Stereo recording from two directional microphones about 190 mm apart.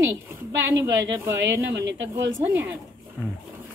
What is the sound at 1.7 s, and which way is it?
Speech, 70° right (ahead or behind).